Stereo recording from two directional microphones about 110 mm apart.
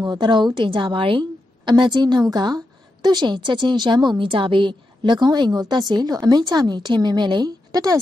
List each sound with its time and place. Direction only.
0.0 s a woman's voice: 40° right (ahead or behind)